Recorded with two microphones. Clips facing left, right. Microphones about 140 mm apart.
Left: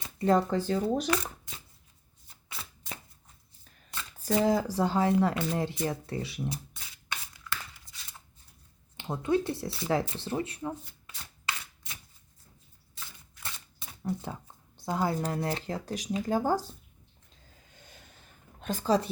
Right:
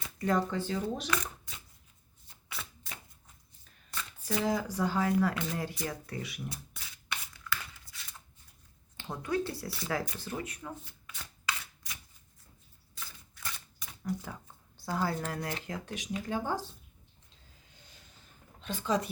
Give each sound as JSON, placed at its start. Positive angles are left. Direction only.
{"t": 0.2, "sound": "speech", "side_deg": 30}
{"t": 4.4, "sound": "speech", "side_deg": 30}
{"t": 7.9, "sound": "a sound", "side_deg": 20}
{"t": 9.0, "sound": "speech", "side_deg": 25}
{"t": 13.4, "sound": "a sound", "side_deg": 30}
{"t": 14.8, "sound": "speech", "side_deg": 20}
{"t": 18.6, "sound": "speech", "side_deg": 40}